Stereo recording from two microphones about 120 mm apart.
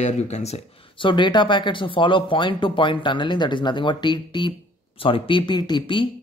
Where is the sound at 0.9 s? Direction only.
45° left (ahead or behind).